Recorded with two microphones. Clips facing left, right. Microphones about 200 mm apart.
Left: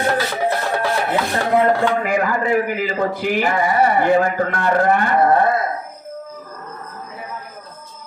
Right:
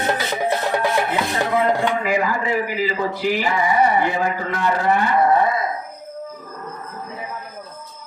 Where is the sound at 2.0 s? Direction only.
50° left (ahead or behind).